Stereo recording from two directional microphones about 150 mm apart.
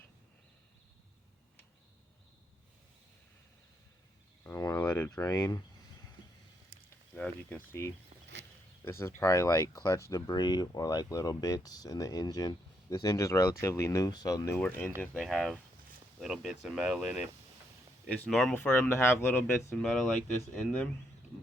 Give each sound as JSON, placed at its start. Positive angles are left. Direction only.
{"t": 4.7, "sound": "a sound", "side_deg": 10}
{"t": 7.2, "sound": "speech", "side_deg": 15}
{"t": 18.3, "sound": "speech", "side_deg": 0}